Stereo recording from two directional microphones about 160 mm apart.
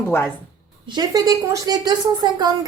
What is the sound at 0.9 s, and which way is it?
A woman's voice, 25° right (ahead or behind).